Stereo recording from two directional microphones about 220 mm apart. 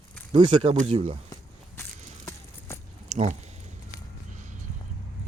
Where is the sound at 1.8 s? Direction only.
10° left (ahead or behind).